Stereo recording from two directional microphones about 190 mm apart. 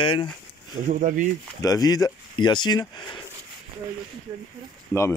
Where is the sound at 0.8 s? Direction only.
45° right (ahead or behind).